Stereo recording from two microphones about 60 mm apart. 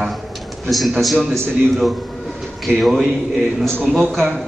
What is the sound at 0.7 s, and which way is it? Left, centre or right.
A man's voice, centre.